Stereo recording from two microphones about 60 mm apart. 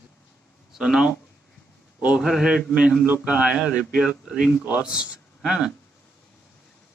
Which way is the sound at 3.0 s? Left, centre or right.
Right.